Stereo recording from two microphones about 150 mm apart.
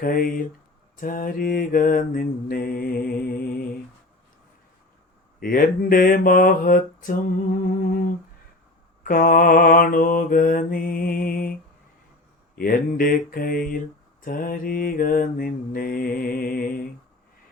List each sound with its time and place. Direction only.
0.0 s mantra: 70° left (ahead or behind)
5.4 s mantra: 75° left (ahead or behind)
12.5 s mantra: 75° left (ahead or behind)